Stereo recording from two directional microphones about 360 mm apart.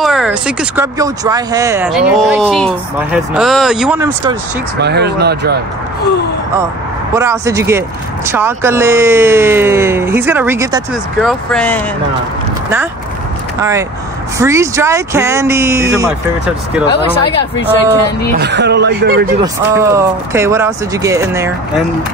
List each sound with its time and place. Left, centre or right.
0.0 s speech: centre
4.7 s speech: right
7.2 s speech: centre
11.2 s speech: centre
13.6 s speech: centre
16.8 s speech: centre
18.4 s speech: right
19.4 s speech: centre